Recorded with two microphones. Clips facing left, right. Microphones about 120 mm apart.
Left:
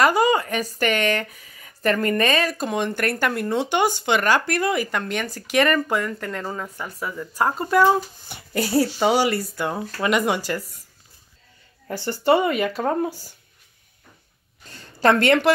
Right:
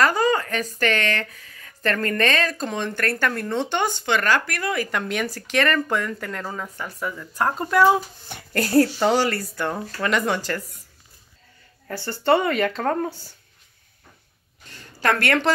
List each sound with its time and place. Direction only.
0.0 s speech: 15° left (ahead or behind)
4.9 s speech: centre (ahead or behind)
11.9 s speech: 15° left (ahead or behind)
14.7 s a sound: 35° left (ahead or behind)
15.0 s a woman's voice: 25° left (ahead or behind)